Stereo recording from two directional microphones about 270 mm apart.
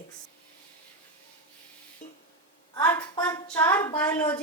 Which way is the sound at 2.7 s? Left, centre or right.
Centre.